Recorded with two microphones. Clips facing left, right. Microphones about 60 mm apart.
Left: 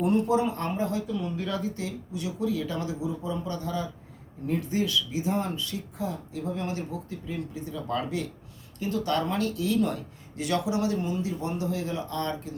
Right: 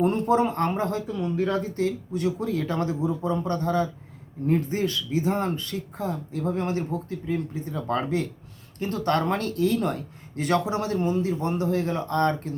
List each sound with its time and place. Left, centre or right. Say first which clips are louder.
0.0 s speech: right 2 dB; right
1.0 s speech: right 5 dB; right